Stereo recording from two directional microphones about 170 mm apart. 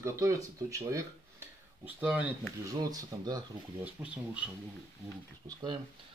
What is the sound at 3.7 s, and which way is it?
Speech, 10° right (ahead or behind).